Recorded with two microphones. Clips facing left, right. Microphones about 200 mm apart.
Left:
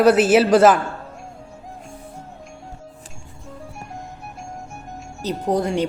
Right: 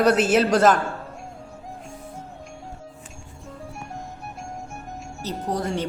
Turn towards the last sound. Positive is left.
turn(degrees=15)  # may be behind; listen again after turning